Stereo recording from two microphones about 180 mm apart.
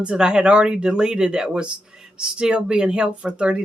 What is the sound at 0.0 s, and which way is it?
Speech, 5° right (ahead or behind).